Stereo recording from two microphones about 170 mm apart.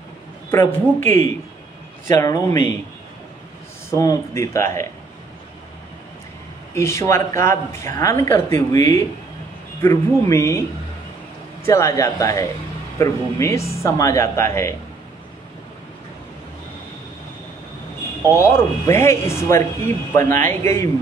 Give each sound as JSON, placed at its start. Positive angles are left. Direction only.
{"t": 0.5, "sound": "speech", "side_deg": 15}
{"t": 3.9, "sound": "speech", "side_deg": 20}
{"t": 6.7, "sound": "speech", "side_deg": 15}
{"t": 11.6, "sound": "speech", "side_deg": 15}
{"t": 18.3, "sound": "speech", "side_deg": 15}